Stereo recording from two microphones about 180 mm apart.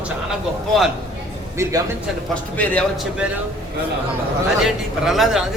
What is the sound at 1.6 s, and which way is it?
Speech, 15° right (ahead or behind).